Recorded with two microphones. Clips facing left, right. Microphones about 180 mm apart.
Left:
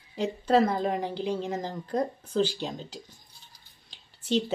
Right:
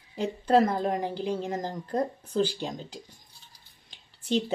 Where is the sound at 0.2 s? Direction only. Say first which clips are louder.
Right 1 dB; 10° right (ahead or behind).